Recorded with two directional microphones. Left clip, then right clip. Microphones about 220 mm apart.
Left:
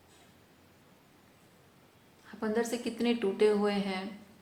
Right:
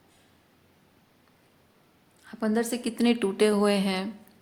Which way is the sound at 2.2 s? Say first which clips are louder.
Right 4 dB; 45° right (ahead or behind).